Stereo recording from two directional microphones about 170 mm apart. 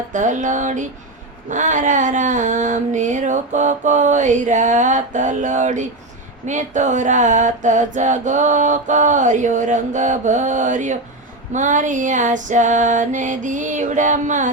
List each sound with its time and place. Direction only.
0.1 s mantra: 45° right (ahead or behind)